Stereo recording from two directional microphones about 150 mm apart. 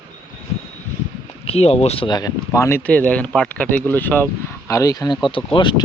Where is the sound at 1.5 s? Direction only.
45° left (ahead or behind); by 2.8 s 20° left (ahead or behind).